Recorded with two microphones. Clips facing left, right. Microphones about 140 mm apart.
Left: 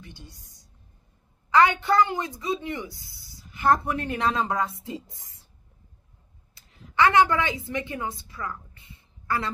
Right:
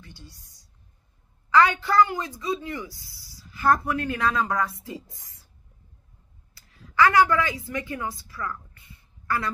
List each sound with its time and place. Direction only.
0.0 s a woman's voice: 20° left (ahead or behind)
1.5 s a woman's voice: 20° left (ahead or behind)
6.5 s a woman's voice: 20° left (ahead or behind)